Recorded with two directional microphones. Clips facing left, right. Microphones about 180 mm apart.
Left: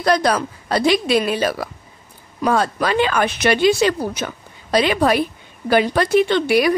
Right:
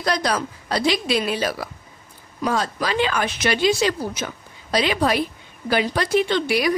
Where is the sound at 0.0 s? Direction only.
55° left (ahead or behind).